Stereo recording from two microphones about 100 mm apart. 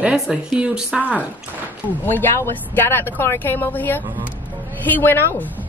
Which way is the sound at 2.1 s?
20° left (ahead or behind).